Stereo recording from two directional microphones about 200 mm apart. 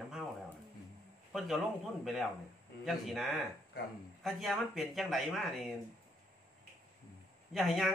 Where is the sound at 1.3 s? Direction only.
Centre (ahead or behind).